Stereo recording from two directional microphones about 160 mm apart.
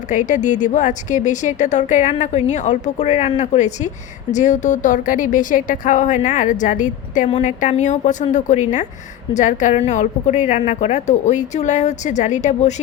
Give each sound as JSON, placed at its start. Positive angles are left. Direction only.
{"t": 0.1, "sound": "a woman's voice", "side_deg": 50}